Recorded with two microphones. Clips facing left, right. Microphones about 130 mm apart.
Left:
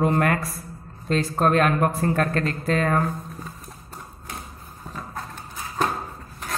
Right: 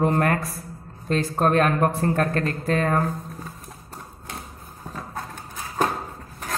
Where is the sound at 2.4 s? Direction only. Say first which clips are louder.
Even; 20° right (ahead or behind).